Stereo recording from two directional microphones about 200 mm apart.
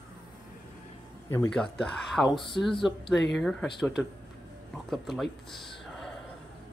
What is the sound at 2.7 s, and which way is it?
Music, 25° left (ahead or behind).